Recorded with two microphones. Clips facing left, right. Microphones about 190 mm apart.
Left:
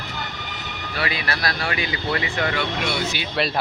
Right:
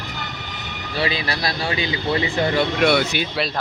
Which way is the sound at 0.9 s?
25° right (ahead or behind).